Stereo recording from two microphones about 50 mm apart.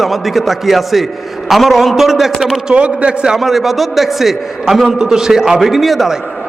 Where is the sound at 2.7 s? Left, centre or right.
Right.